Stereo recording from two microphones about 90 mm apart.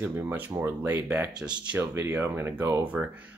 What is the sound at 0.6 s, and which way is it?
Speech, 20° right (ahead or behind).